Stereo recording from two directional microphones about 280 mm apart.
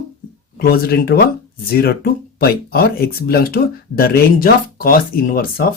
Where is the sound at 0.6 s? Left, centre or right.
Left.